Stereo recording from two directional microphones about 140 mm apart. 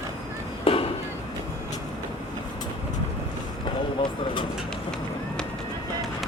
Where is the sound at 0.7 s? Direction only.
40° left (ahead or behind).